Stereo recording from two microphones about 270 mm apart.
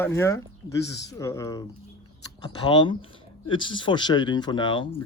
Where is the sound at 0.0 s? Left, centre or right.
Centre.